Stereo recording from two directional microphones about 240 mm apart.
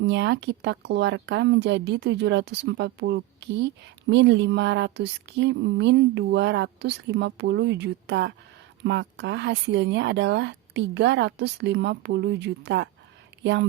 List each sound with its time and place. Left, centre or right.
0.0 s speech: right